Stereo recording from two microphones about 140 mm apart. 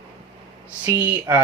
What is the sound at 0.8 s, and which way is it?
Speech, 15° right (ahead or behind).